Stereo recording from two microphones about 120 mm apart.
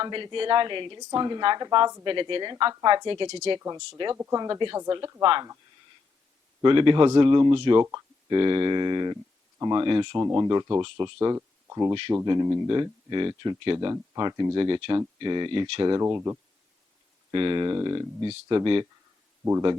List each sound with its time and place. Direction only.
0.0 s speech: 40° right (ahead or behind)
4.1 s speech: 25° right (ahead or behind)
5.2 s speech: 40° right (ahead or behind)
6.6 s speech: 45° right (ahead or behind)
10.2 s speech: 25° right (ahead or behind)
12.6 s speech: 40° right (ahead or behind)
16.0 s speech: 25° right (ahead or behind)
17.3 s speech: 40° right (ahead or behind)